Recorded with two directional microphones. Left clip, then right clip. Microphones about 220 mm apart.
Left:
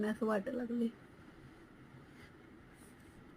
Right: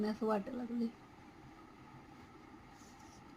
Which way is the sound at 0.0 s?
5° left (ahead or behind).